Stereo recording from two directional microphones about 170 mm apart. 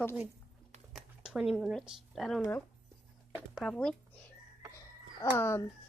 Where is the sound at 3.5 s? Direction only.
5° left (ahead or behind).